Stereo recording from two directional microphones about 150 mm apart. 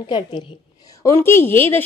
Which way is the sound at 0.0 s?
35° left (ahead or behind).